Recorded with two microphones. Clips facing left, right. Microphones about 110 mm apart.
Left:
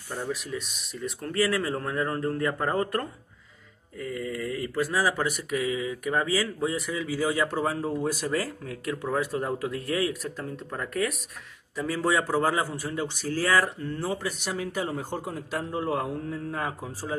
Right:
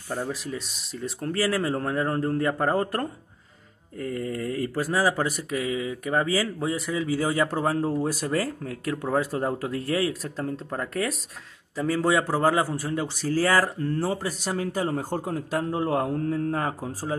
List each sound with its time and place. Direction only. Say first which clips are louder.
0.3 s a man's voice: even; 30° right (ahead or behind)
4.0 s a man's voice: right 2 dB; 40° right (ahead or behind)